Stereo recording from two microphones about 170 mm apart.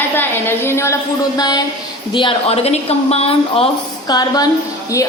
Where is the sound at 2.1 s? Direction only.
35° left (ahead or behind).